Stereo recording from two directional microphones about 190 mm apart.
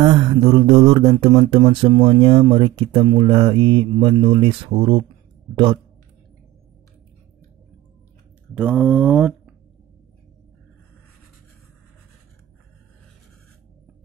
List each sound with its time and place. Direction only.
0.0 s mantra: 25° right (ahead or behind)
8.5 s mantra: 5° right (ahead or behind)